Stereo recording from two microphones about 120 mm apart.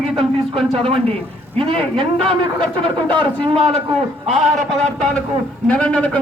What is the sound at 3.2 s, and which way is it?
Speech, 50° right (ahead or behind).